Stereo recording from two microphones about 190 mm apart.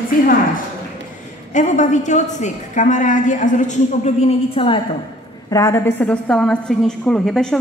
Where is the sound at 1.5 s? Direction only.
40° left (ahead or behind).